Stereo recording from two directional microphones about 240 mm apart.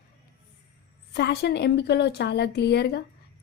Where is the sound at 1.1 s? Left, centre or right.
Left.